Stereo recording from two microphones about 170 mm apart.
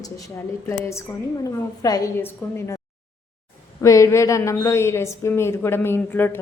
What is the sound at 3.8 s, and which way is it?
A woman's voice, 20° left (ahead or behind).